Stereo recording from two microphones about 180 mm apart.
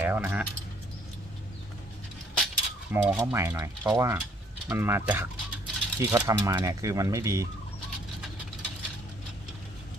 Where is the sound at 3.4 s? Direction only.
15° right (ahead or behind).